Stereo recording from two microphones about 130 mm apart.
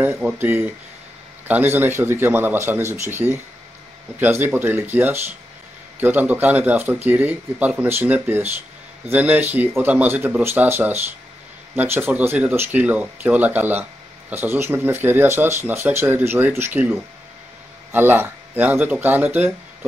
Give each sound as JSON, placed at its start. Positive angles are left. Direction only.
{"t": 0.0, "sound": "speech", "side_deg": -15}